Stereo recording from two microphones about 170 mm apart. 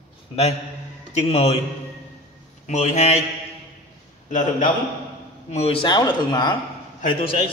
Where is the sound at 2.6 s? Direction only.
45° left (ahead or behind).